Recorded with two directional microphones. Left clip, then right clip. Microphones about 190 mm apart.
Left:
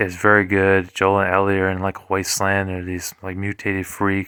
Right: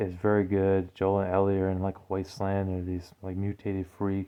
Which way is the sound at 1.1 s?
10° left (ahead or behind).